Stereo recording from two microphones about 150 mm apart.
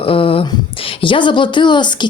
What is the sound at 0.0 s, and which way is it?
Speech, 35° left (ahead or behind).